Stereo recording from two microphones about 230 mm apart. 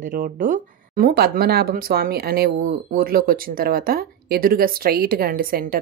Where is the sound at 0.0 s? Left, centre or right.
Right.